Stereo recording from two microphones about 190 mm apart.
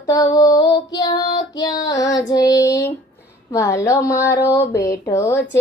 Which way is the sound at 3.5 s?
15° left (ahead or behind).